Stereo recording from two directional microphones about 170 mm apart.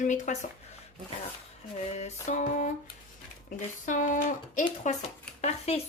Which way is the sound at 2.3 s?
45° left (ahead or behind).